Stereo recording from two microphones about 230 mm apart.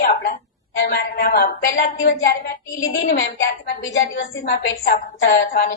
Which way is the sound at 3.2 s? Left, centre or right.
Left.